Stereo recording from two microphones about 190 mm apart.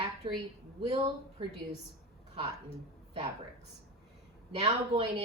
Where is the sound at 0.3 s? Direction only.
30° right (ahead or behind).